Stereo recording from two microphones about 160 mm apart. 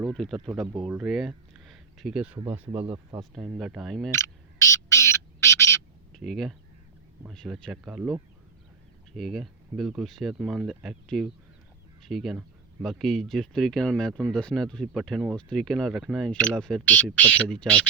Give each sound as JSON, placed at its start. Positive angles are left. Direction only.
{"t": 0.1, "sound": "speech", "side_deg": 0}
{"t": 4.2, "sound": "bird", "side_deg": 20}
{"t": 6.1, "sound": "speech", "side_deg": 0}
{"t": 9.1, "sound": "speech", "side_deg": 0}